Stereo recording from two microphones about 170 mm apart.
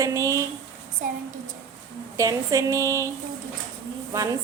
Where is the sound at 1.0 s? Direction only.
50° right (ahead or behind).